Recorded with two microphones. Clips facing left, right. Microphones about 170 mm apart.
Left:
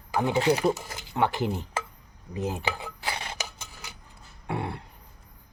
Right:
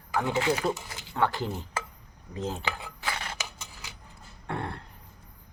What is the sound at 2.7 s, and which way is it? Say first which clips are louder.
Dishes: left 2 dB; 25° left (ahead or behind).